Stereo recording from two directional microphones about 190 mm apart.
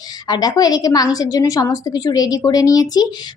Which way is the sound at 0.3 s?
20° left (ahead or behind).